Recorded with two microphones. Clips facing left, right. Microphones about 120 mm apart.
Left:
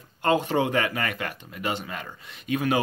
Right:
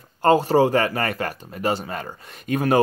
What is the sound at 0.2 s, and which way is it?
Speech, 40° right (ahead or behind).